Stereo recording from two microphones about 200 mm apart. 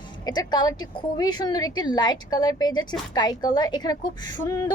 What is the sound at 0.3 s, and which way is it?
A woman's voice, 20° left (ahead or behind).